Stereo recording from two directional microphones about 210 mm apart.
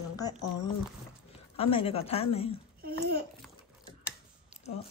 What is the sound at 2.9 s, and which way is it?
Speech, 50° right (ahead or behind).